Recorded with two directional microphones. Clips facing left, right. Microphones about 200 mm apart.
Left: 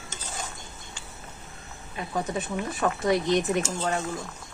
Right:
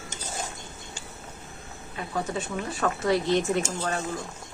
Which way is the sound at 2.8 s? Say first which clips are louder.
Even; 15° left (ahead or behind).